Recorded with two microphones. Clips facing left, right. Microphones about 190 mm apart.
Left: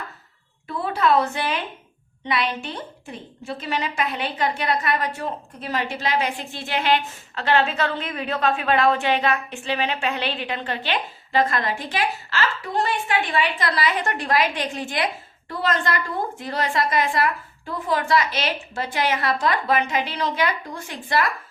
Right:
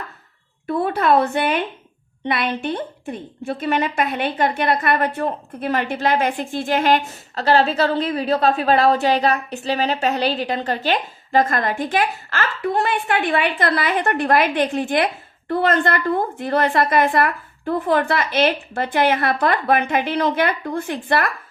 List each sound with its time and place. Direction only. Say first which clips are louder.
0.8 s a woman's voice: right 3 dB; 55° right (ahead or behind)